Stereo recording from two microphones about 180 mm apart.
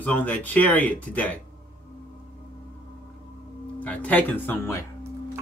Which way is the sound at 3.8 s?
10° left (ahead or behind).